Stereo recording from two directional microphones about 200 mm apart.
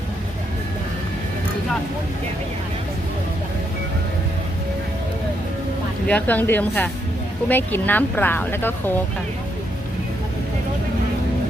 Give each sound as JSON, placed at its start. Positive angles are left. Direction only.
{"t": 6.1, "sound": "speech", "side_deg": 10}